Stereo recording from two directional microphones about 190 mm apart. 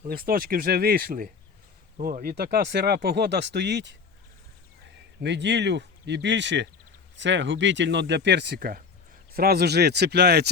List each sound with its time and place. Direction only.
0.1 s speech: 50° right (ahead or behind)
5.2 s speech: 65° right (ahead or behind)